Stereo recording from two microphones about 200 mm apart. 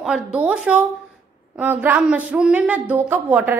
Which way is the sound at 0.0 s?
5° right (ahead or behind).